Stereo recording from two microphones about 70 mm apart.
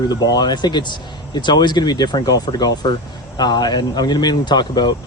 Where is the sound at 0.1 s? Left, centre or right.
Left.